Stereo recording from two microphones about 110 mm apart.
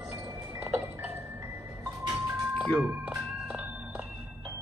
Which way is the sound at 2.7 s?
10° right (ahead or behind).